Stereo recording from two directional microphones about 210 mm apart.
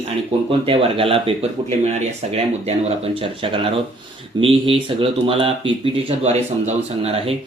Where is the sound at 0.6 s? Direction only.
25° right (ahead or behind).